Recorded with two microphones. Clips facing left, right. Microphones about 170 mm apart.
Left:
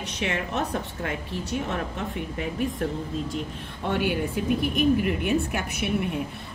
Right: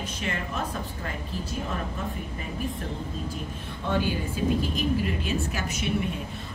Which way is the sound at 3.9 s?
70° left (ahead or behind).